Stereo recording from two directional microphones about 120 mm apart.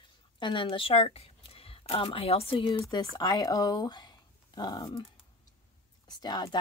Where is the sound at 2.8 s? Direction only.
30° left (ahead or behind).